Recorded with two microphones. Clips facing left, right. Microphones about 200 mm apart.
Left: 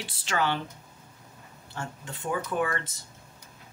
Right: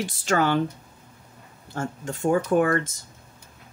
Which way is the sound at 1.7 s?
45° right (ahead or behind).